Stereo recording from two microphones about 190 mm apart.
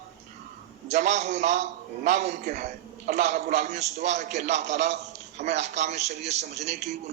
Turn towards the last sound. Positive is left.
turn(degrees=-40)  # may be behind; listen again after turning